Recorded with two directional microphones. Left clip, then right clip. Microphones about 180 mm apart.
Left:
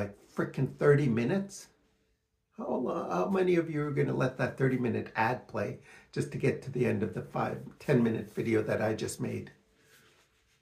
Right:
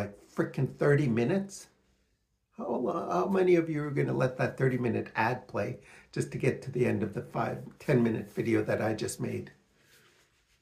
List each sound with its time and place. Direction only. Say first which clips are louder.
0.0 s a man's voice: right 1 dB; 20° right (ahead or behind)